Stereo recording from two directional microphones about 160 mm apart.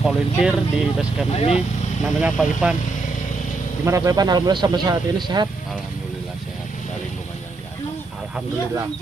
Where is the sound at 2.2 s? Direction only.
5° right (ahead or behind).